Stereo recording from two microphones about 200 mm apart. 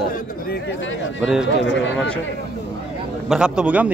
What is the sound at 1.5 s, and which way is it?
Speech, 65° left (ahead or behind).